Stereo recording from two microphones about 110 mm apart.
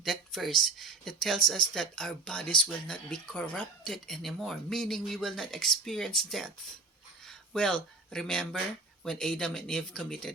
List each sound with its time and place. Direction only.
0.0 s speech: centre (ahead or behind)